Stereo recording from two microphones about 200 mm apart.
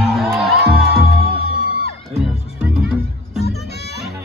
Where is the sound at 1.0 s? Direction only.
50° right (ahead or behind).